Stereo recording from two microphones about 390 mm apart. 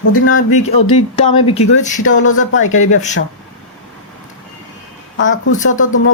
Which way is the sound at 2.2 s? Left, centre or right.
Left.